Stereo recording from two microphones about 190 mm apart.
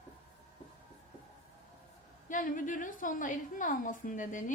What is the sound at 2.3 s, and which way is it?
A woman's voice, 45° left (ahead or behind).